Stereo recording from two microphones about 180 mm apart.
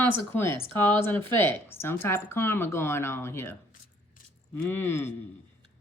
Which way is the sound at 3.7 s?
50° left (ahead or behind).